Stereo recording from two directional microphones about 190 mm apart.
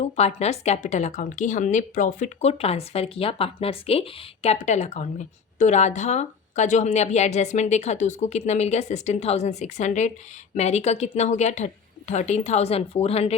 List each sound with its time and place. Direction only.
0.0 s a woman's voice: 35° left (ahead or behind)